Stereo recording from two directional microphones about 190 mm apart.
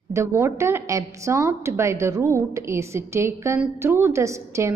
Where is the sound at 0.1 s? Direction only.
15° right (ahead or behind).